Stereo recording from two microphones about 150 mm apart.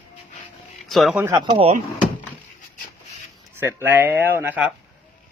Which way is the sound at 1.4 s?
40° right (ahead or behind).